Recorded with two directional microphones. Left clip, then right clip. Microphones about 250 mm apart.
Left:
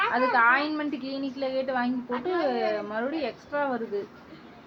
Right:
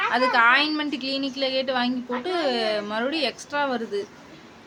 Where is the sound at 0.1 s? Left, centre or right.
Right.